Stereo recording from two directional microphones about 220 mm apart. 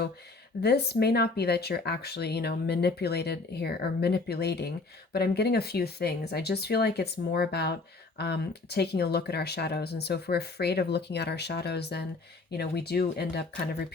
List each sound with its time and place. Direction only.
0.6 s speech: 45° left (ahead or behind)